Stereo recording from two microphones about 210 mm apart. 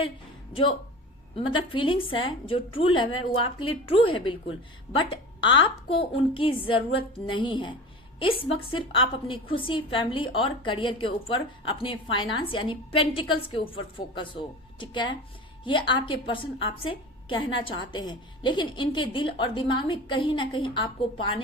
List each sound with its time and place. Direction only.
1.4 s a woman's voice: 25° left (ahead or behind)